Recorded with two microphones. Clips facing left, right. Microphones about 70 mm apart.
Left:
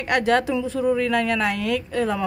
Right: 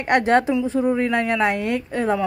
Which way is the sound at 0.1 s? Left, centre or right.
Right.